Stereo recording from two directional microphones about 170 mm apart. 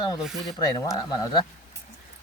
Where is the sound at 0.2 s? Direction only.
Centre (ahead or behind).